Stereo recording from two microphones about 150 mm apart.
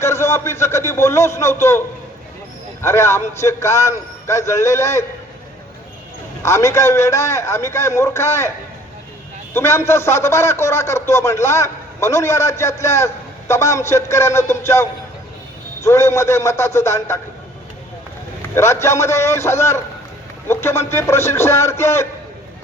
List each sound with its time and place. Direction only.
0.0 s a man's voice: 20° left (ahead or behind)
2.8 s a man's voice: 20° left (ahead or behind)
6.4 s a man's voice: 20° left (ahead or behind)
9.6 s a man's voice: 15° left (ahead or behind)
18.5 s a man's voice: 20° left (ahead or behind)